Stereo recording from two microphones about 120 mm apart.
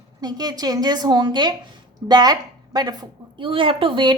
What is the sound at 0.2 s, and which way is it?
A woman's voice, 35° right (ahead or behind).